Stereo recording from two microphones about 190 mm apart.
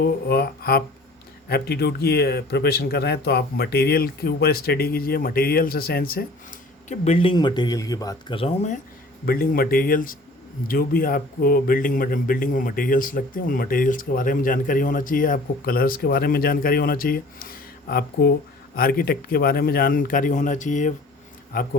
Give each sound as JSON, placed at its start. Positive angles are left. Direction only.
{"t": 0.0, "sound": "speech", "side_deg": 55}
{"t": 6.8, "sound": "speech", "side_deg": 40}
{"t": 9.2, "sound": "speech", "side_deg": 50}